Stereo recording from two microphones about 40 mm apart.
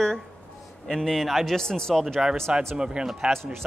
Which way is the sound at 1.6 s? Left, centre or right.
Centre.